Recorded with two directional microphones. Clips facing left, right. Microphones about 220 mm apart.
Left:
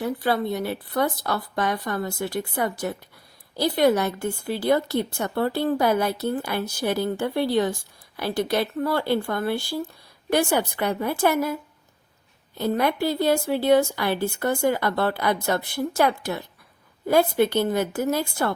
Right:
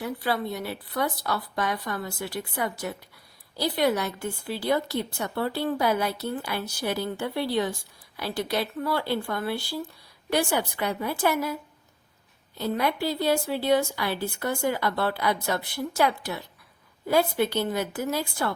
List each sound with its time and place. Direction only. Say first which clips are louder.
0.0 s a woman's voice: left 4 dB; 45° left (ahead or behind)
12.5 s a woman's voice: left 4 dB; 50° left (ahead or behind)